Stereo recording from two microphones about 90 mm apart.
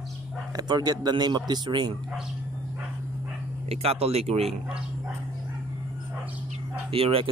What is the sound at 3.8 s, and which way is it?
Speech, 90° right.